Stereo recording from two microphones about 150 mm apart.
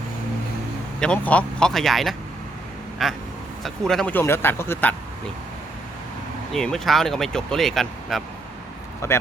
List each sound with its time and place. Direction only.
0.9 s speech: 5° left (ahead or behind)
6.5 s speech: 5° left (ahead or behind)
9.0 s speech: 20° left (ahead or behind)